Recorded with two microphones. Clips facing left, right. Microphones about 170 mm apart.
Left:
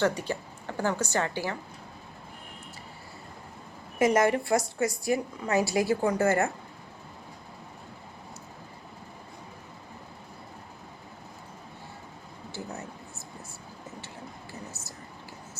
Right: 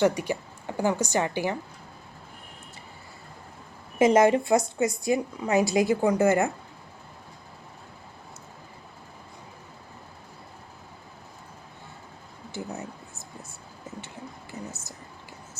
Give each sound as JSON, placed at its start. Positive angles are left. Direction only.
{"t": 0.0, "sound": "a woman's voice", "side_deg": -15}
{"t": 3.9, "sound": "a woman's voice", "side_deg": -25}
{"t": 12.5, "sound": "a sound", "side_deg": -20}